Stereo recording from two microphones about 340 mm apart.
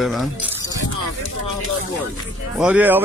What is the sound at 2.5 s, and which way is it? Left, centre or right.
Speech, centre.